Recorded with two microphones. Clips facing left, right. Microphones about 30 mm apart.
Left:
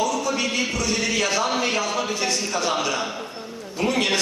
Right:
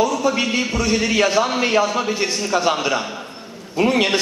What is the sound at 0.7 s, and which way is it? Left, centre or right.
A man's voice, centre.